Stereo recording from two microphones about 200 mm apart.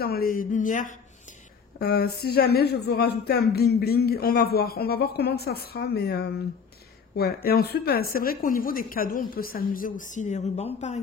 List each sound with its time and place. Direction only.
0.0 s speech: 50° left (ahead or behind)
1.8 s a woman's voice: 50° left (ahead or behind)
7.4 s a woman's voice: 50° left (ahead or behind); by 11.0 s 35° left (ahead or behind)